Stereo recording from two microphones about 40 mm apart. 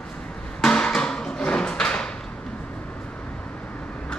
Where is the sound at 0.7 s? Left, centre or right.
Left.